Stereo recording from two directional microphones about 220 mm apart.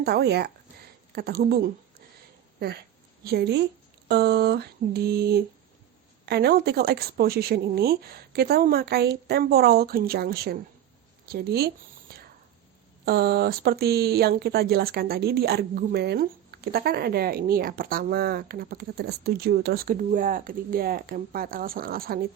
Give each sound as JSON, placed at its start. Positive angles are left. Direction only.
{"t": 0.0, "sound": "speech", "side_deg": -45}
{"t": 11.3, "sound": "a sound", "side_deg": -45}
{"t": 13.1, "sound": "speech", "side_deg": -45}